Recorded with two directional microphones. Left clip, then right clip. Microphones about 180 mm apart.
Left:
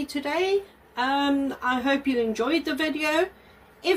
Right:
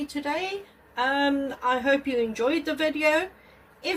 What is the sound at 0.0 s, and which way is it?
Speech, 35° left (ahead or behind).